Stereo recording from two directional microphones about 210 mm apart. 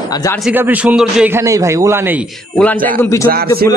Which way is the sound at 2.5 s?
10° left (ahead or behind).